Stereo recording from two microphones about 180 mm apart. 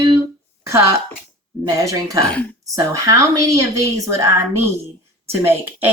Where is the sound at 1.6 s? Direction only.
20° right (ahead or behind).